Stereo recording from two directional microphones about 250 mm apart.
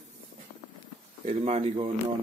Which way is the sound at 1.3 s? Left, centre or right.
Right.